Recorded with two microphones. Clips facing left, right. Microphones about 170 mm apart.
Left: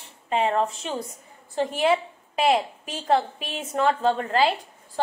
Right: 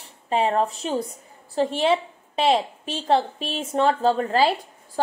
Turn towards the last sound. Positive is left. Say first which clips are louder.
# right 2 dB
turn(degrees=-35)  # may be behind; listen again after turning